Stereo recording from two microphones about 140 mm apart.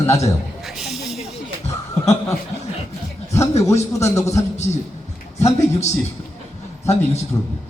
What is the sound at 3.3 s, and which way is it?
Speech, 20° left (ahead or behind).